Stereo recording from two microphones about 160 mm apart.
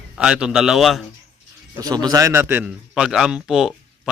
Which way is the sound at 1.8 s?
25° right (ahead or behind).